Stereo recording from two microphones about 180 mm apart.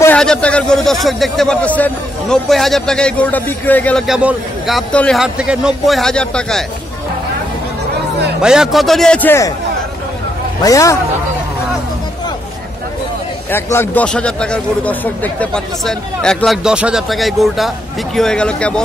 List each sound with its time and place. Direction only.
0.0 s speech: 5° left (ahead or behind)
4.1 s speech: 5° right (ahead or behind)
8.4 s speech: 5° right (ahead or behind); by 9.5 s 10° left (ahead or behind)
10.6 s a man's voice: 20° left (ahead or behind)
13.5 s speech: 10° left (ahead or behind)